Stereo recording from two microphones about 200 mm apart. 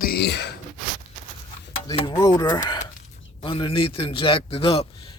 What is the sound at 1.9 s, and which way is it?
Speech, 20° left (ahead or behind).